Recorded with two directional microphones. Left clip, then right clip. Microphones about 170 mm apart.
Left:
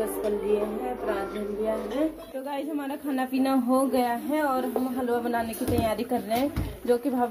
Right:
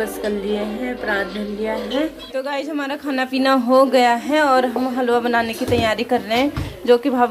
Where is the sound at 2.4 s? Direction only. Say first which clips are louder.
Right 6 dB; 10° right (ahead or behind).